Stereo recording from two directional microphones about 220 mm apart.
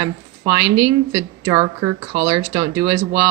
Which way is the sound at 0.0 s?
15° right (ahead or behind).